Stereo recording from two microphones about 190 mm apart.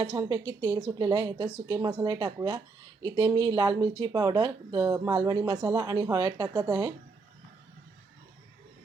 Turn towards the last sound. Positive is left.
turn(degrees=-20)  # may be behind; listen again after turning